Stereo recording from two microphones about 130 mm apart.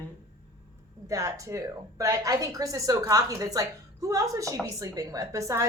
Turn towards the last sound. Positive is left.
turn(degrees=-25)  # may be behind; listen again after turning